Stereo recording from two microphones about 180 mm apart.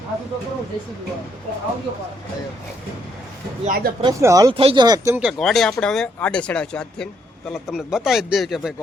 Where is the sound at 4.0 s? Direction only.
15° right (ahead or behind).